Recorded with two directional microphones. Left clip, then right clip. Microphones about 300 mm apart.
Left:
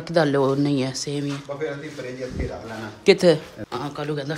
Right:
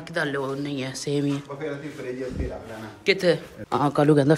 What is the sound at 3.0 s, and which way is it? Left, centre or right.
Speech, centre.